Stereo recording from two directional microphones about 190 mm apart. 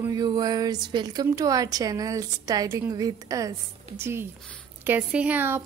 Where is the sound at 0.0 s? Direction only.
20° right (ahead or behind).